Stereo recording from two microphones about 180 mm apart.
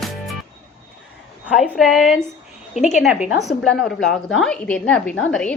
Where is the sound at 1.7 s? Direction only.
Centre (ahead or behind).